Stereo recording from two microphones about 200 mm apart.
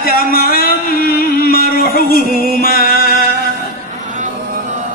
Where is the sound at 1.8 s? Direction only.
45° left (ahead or behind).